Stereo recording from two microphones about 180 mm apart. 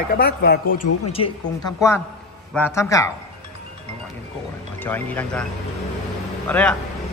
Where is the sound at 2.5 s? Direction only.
15° left (ahead or behind).